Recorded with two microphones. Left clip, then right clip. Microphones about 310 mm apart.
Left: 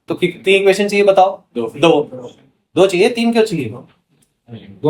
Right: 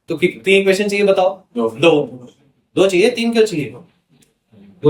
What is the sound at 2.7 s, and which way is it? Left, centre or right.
Speech, centre.